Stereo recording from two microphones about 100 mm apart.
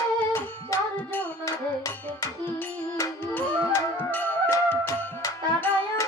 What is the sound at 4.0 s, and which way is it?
Music, 20° left (ahead or behind).